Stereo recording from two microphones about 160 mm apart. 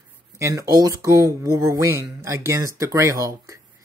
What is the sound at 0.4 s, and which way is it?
Speech, 20° right (ahead or behind).